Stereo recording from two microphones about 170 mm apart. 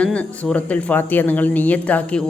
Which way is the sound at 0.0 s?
5° left (ahead or behind).